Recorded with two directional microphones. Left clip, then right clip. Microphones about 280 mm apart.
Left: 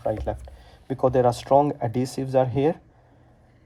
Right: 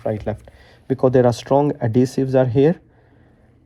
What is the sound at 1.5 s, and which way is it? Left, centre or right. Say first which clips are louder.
Speech: even; right.